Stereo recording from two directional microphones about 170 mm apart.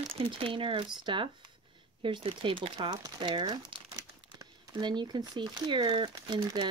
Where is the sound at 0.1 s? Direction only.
30° right (ahead or behind).